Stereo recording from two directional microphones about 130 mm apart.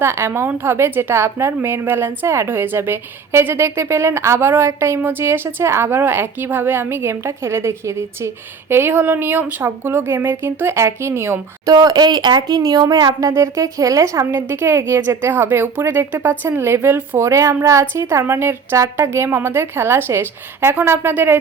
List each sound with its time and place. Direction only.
0.0 s a woman's voice: 20° right (ahead or behind)
11.7 s speech: 30° right (ahead or behind); by 21.3 s 15° right (ahead or behind)